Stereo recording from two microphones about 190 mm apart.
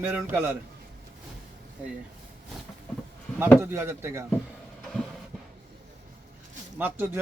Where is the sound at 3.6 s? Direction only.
15° right (ahead or behind).